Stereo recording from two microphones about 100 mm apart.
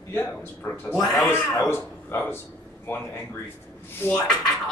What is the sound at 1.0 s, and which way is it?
Speech, centre (ahead or behind).